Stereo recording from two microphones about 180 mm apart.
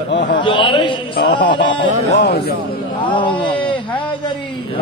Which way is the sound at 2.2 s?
60° left (ahead or behind).